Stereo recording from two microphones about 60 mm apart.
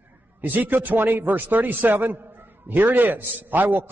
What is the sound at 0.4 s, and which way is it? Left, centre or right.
A man's voice, right.